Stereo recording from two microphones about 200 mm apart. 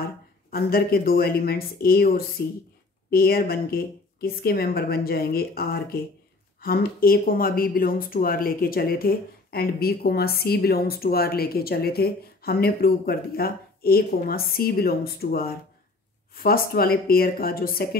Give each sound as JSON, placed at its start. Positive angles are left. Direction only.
{"t": 0.5, "sound": "speech", "side_deg": 50}